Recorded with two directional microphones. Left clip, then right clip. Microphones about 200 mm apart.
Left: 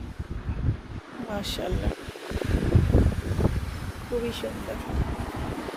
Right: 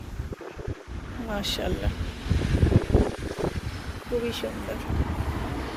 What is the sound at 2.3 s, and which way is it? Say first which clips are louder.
Boat: right 1 dB; 40° left (ahead or behind).